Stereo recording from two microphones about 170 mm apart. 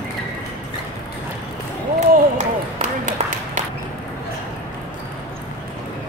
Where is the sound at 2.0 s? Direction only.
45° right (ahead or behind).